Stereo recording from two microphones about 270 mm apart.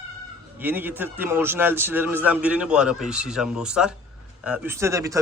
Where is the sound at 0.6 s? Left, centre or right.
Centre.